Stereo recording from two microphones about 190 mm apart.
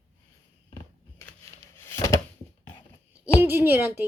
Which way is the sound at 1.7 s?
15° left (ahead or behind).